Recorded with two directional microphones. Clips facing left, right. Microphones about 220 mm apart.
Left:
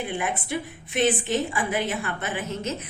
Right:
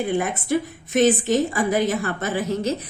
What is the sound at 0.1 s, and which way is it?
A woman's voice, 40° right (ahead or behind).